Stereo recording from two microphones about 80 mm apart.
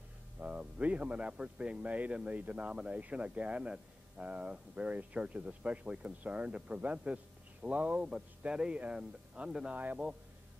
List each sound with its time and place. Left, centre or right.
0.4 s speech: centre